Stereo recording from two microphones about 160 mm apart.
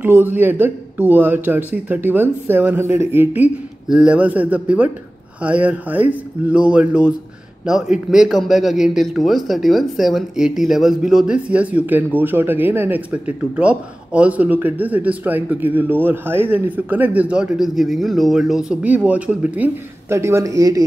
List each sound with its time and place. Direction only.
0.0 s a man's voice: 10° right (ahead or behind)